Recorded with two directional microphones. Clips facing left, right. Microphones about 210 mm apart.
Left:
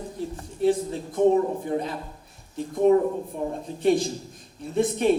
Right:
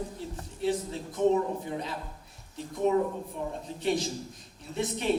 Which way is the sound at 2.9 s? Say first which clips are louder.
Left 7 dB; 50° left (ahead or behind).